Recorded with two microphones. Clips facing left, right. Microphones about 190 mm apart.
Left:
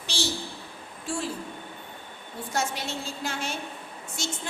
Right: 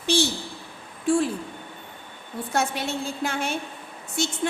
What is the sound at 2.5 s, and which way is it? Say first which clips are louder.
A woman's voice: right 4 dB; 55° right (ahead or behind).